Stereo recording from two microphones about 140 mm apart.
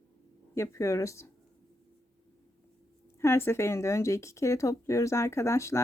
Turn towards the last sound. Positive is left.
turn(degrees=20)  # may be behind; listen again after turning